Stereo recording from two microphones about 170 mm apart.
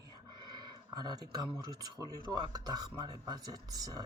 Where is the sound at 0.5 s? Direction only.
25° right (ahead or behind).